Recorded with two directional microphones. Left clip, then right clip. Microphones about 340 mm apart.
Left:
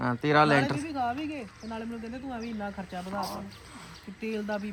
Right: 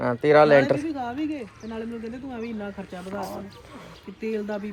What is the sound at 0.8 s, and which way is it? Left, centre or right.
Speech, left.